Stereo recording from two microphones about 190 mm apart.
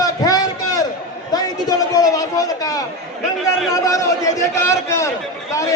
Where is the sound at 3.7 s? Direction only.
15° left (ahead or behind).